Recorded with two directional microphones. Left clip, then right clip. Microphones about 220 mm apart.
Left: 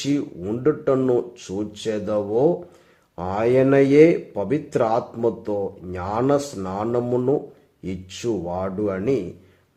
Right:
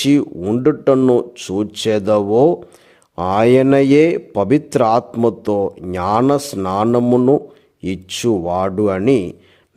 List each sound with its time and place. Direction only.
0.0 s a man's voice: 45° right (ahead or behind)